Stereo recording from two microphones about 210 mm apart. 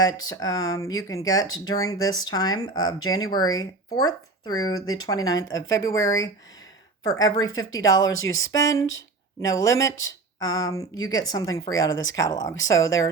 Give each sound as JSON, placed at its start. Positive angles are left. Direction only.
{"t": 0.0, "sound": "speech", "side_deg": 20}
{"t": 7.5, "sound": "speech", "side_deg": 70}
{"t": 7.8, "sound": "speech", "side_deg": 15}
{"t": 8.0, "sound": "speech", "side_deg": 65}
{"t": 8.4, "sound": "speech", "side_deg": 15}
{"t": 11.9, "sound": "speech", "side_deg": 65}
{"t": 12.1, "sound": "speech", "side_deg": 15}